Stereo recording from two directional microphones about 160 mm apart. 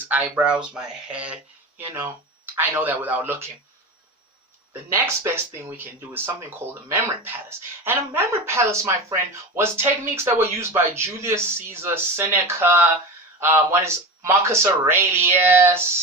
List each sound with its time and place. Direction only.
0.1 s speech: 10° right (ahead or behind)
4.9 s speech: 15° right (ahead or behind)